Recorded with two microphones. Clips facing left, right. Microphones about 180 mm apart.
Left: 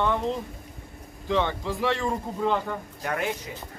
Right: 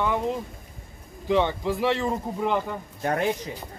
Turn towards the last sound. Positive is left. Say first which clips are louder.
# right 4 dB
turn(degrees=-35)  # may be behind; listen again after turning